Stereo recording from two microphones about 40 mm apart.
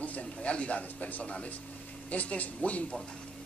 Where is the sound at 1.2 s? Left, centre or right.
Left.